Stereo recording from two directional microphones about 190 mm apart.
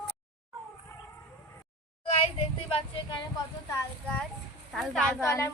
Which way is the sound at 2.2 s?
30° left (ahead or behind).